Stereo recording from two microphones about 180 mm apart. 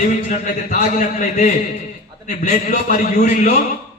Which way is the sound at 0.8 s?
40° left (ahead or behind).